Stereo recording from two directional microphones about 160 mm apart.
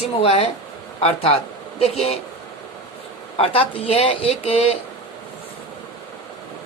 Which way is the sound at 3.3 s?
35° left (ahead or behind).